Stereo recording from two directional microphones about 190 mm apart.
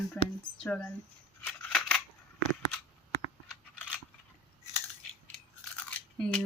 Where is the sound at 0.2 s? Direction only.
5° left (ahead or behind).